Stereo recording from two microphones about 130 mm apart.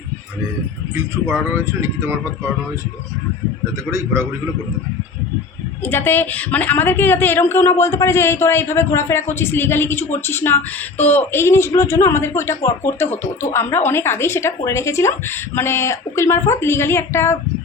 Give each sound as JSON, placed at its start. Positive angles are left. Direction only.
{"t": 0.9, "sound": "speech", "side_deg": -20}
{"t": 5.8, "sound": "speech", "side_deg": 15}